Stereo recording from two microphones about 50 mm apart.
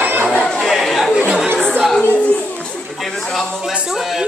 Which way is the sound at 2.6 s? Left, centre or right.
Centre.